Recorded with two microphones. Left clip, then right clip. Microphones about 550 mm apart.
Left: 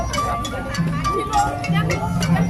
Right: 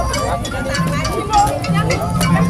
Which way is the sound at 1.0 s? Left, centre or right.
Left.